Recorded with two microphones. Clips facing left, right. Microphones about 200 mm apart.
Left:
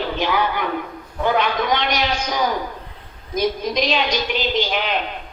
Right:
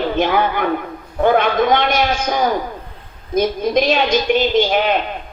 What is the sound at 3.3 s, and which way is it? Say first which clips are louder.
A woman's voice: right 5 dB; 50° right (ahead or behind).